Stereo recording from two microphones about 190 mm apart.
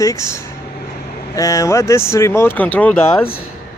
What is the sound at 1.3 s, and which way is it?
Speech, 15° left (ahead or behind).